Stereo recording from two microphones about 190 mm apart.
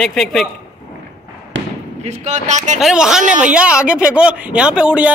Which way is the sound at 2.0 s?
40° right (ahead or behind).